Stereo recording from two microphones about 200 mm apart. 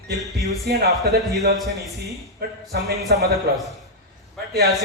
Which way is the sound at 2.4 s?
50° right (ahead or behind).